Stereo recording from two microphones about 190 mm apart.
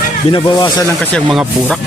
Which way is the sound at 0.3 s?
25° left (ahead or behind).